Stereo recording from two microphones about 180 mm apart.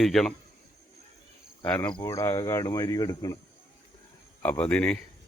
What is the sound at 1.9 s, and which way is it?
Speech, 20° left (ahead or behind).